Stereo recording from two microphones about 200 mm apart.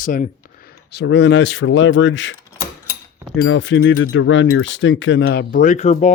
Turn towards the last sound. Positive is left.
turn(degrees=35)  # may be behind; listen again after turning